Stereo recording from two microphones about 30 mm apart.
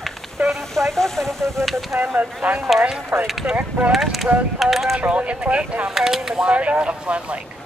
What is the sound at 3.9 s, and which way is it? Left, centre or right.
Speech, centre.